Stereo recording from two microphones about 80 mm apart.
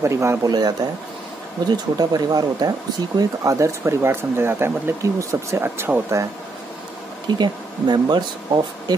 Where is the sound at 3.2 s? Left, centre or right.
Right.